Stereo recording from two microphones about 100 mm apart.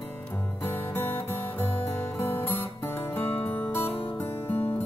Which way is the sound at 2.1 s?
25° left (ahead or behind).